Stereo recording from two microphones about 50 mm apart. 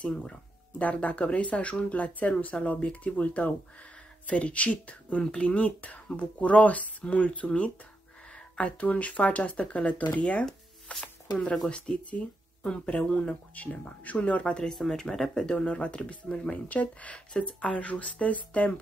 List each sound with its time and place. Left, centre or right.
0.1 s speech: centre
0.7 s speech: left
14.7 s speech: centre; by 18.8 s left